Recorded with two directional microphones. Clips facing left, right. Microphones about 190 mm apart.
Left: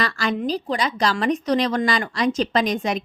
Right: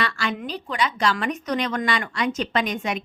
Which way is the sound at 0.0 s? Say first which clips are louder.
Left 4 dB; 40° left (ahead or behind).